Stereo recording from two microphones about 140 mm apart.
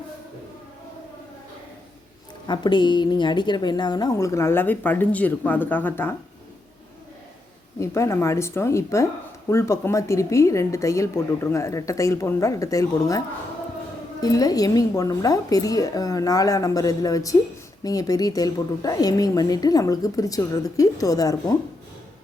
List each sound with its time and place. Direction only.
2.5 s a woman's voice: 35° left (ahead or behind); by 6.1 s 15° left (ahead or behind)
7.8 s a woman's voice: 20° left (ahead or behind)